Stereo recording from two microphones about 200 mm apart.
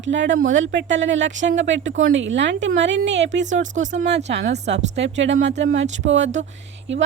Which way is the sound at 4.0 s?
60° right (ahead or behind).